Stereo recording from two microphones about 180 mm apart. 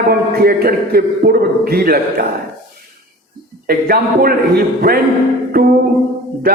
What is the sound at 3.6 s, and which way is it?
A man's voice, 55° right (ahead or behind).